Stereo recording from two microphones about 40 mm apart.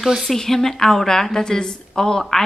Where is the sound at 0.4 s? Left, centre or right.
Centre.